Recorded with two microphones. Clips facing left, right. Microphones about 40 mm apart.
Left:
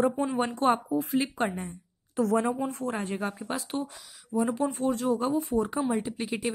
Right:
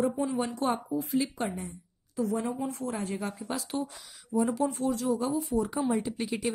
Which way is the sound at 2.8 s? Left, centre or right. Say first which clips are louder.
Left 2 dB; left.